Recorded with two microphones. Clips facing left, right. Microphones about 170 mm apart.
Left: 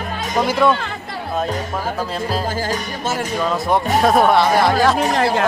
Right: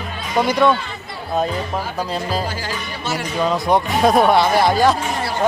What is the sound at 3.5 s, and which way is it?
Speech, centre (ahead or behind).